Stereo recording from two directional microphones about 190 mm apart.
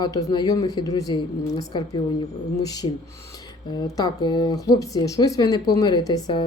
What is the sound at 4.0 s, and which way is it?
A woman's voice, 20° left (ahead or behind).